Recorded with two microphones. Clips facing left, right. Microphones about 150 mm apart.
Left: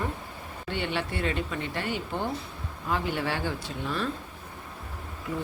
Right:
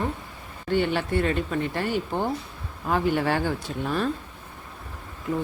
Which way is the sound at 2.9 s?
50° right (ahead or behind).